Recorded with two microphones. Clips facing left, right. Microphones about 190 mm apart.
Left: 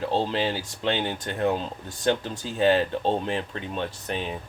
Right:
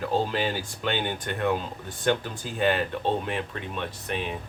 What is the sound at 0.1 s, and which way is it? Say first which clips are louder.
Speech: right 1 dB; 30° left (ahead or behind).